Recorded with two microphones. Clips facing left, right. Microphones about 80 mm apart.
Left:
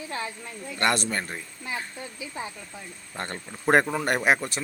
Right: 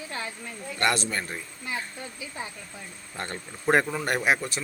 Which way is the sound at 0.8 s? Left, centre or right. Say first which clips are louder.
Left 1 dB; left.